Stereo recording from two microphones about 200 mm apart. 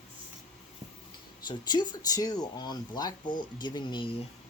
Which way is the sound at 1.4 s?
20° left (ahead or behind).